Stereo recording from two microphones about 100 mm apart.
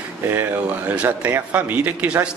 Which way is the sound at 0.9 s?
15° right (ahead or behind).